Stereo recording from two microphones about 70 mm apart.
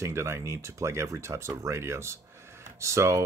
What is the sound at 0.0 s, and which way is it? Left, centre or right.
Speech, right.